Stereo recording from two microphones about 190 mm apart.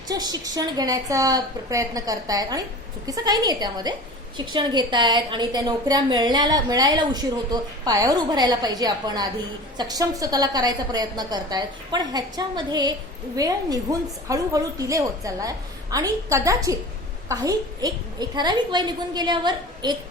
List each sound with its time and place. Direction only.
0.1 s a woman's voice: 20° right (ahead or behind)